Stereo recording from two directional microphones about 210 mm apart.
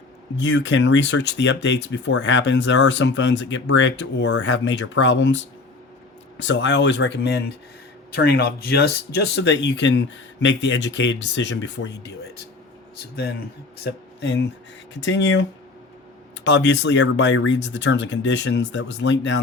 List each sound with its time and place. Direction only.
0.3 s speech: 60° left (ahead or behind)
6.4 s speech: 60° left (ahead or behind)
14.2 s speech: 55° left (ahead or behind)